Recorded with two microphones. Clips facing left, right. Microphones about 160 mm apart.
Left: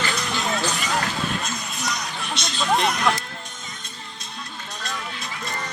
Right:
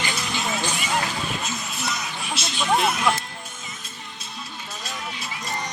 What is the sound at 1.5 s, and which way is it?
Music, 5° right (ahead or behind).